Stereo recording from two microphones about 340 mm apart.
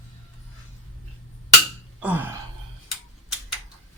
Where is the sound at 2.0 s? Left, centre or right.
Centre.